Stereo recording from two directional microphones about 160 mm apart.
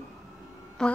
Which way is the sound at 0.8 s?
5° left (ahead or behind).